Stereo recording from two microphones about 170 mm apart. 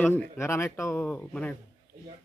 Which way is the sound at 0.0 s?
10° left (ahead or behind).